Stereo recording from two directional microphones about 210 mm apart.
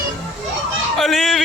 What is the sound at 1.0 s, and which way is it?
Fowl, centre (ahead or behind).